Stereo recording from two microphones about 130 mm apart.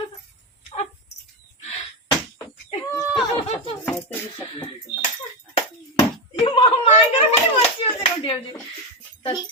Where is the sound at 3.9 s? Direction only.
10° left (ahead or behind).